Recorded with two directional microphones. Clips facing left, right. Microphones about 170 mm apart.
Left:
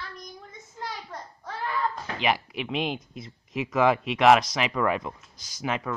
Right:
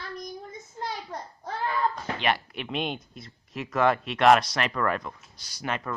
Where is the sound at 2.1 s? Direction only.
5° left (ahead or behind).